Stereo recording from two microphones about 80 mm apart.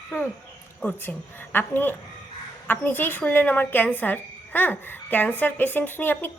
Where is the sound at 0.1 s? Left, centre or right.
Left.